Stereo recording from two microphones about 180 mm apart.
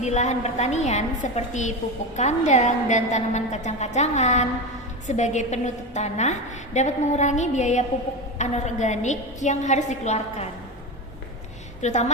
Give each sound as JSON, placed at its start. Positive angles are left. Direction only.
{"t": 0.0, "sound": "a woman's voice", "side_deg": 40}
{"t": 11.8, "sound": "a woman's voice", "side_deg": 40}